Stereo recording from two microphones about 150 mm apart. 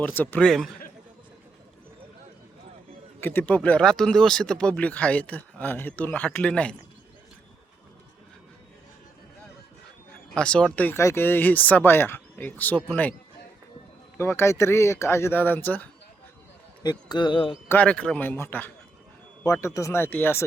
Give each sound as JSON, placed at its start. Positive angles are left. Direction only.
{"t": 0.0, "sound": "speech", "side_deg": 10}
{"t": 3.2, "sound": "speech", "side_deg": 15}
{"t": 10.3, "sound": "speech", "side_deg": 5}
{"t": 14.2, "sound": "speech", "side_deg": 15}
{"t": 16.8, "sound": "speech", "side_deg": 25}
{"t": 17.7, "sound": "speech", "side_deg": 10}